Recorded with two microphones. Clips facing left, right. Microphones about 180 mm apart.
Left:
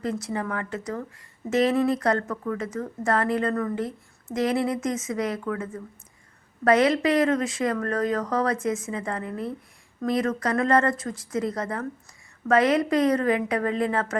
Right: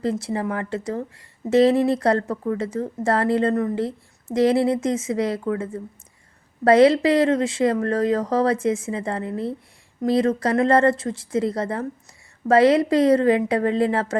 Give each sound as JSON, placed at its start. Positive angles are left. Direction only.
{"t": 0.0, "sound": "speech", "side_deg": -30}